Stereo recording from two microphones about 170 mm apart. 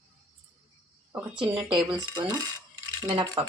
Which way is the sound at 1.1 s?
5° right (ahead or behind).